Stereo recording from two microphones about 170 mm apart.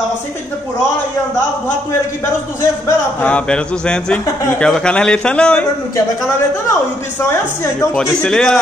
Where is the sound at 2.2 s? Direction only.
15° left (ahead or behind).